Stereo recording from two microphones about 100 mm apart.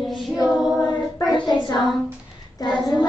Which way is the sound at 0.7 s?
50° left (ahead or behind).